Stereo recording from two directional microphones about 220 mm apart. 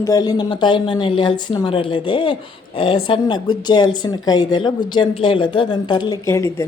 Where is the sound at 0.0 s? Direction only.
15° left (ahead or behind).